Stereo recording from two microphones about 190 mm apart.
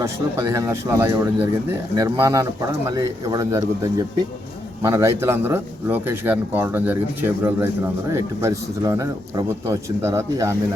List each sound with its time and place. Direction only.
0.0 s speech: 15° right (ahead or behind)
4.8 s speech: 15° right (ahead or behind)